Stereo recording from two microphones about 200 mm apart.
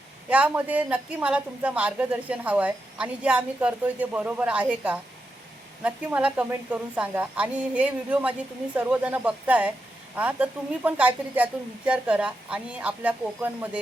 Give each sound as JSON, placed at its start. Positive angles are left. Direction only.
{"t": 0.3, "sound": "a woman's voice", "side_deg": -5}